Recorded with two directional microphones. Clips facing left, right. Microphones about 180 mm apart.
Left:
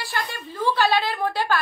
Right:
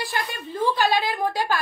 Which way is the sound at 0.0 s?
15° right (ahead or behind).